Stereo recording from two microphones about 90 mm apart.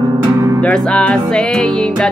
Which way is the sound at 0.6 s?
10° left (ahead or behind).